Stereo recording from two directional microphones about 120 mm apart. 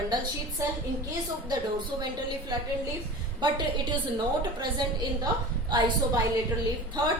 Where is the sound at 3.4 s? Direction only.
40° right (ahead or behind).